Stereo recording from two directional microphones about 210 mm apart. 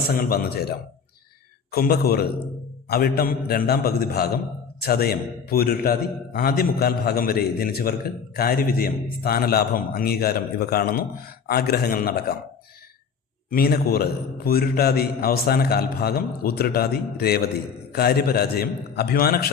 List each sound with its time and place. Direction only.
0.1 s a man's voice: 45° left (ahead or behind)
1.7 s a man's voice: 45° left (ahead or behind)
13.5 s a man's voice: 45° left (ahead or behind)